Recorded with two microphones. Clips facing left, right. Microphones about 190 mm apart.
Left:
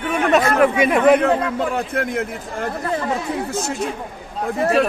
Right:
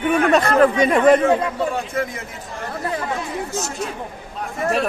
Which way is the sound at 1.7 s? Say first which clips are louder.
Left 3 dB; 60° left (ahead or behind).